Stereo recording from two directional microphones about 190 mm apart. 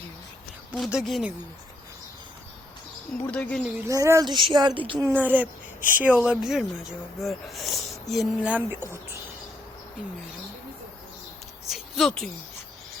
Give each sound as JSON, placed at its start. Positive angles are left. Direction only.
{"t": 0.8, "sound": "speech", "side_deg": 0}
{"t": 3.2, "sound": "speech", "side_deg": 5}
{"t": 3.6, "sound": "speech", "side_deg": -15}
{"t": 5.0, "sound": "speech", "side_deg": -10}
{"t": 11.7, "sound": "speech", "side_deg": 0}